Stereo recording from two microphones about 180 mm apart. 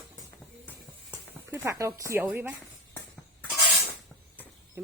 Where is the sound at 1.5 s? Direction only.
15° right (ahead or behind).